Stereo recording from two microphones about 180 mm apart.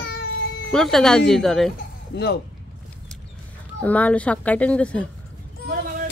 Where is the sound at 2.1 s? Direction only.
70° left (ahead or behind).